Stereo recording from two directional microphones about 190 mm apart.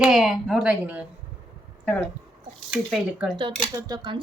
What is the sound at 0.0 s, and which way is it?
Speech, centre (ahead or behind).